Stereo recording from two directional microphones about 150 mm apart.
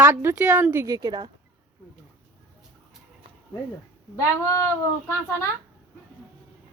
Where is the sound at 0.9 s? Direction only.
25° right (ahead or behind).